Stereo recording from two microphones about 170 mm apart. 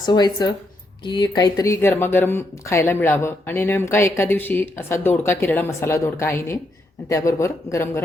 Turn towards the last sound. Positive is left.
turn(degrees=15)  # may be behind; listen again after turning